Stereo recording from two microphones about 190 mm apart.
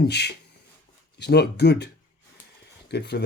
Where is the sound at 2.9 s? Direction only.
60° left (ahead or behind).